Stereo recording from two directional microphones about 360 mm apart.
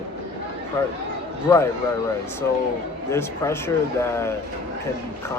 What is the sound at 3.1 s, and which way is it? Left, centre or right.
Speech, centre.